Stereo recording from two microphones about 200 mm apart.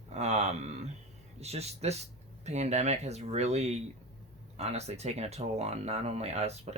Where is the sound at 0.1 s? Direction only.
35° right (ahead or behind).